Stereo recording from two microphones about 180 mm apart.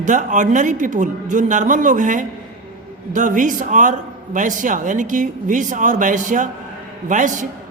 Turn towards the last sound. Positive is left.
turn(degrees=-45)  # may be behind; listen again after turning